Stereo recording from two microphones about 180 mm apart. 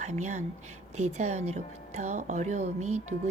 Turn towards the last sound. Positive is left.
turn(degrees=-35)  # may be behind; listen again after turning